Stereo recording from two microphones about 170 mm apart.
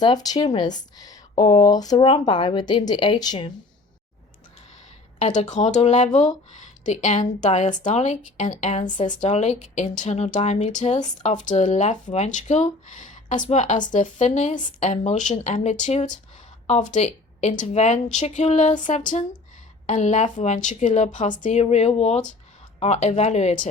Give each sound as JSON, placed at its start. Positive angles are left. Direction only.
{"t": 0.0, "sound": "speech", "side_deg": 25}
{"t": 5.2, "sound": "speech", "side_deg": 40}